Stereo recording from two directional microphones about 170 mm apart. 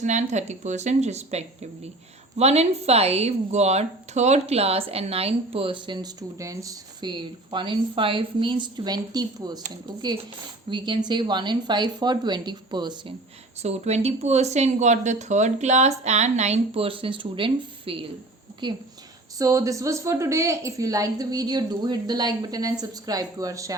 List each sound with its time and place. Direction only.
0.0 s a woman's voice: 45° right (ahead or behind); by 9.6 s 25° right (ahead or behind)
10.7 s a woman's voice: 30° right (ahead or behind)
13.6 s a woman's voice: 40° right (ahead or behind); by 23.7 s 20° right (ahead or behind)